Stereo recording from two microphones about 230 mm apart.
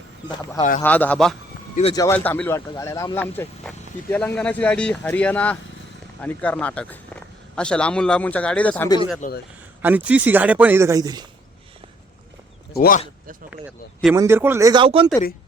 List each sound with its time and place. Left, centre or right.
0.8 s speech: centre
1.7 s speech: left
2.0 s a man's voice: centre
9.2 s a man's voice: left
9.8 s speech: centre
12.7 s speech: left
14.2 s speech: centre